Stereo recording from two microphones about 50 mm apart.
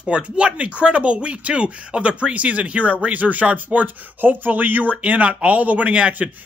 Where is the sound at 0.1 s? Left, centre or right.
Right.